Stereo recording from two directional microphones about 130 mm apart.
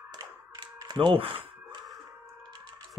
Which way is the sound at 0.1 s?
30° right (ahead or behind).